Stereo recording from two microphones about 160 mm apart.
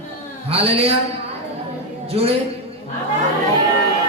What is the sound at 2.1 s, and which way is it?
Speech, 40° right (ahead or behind).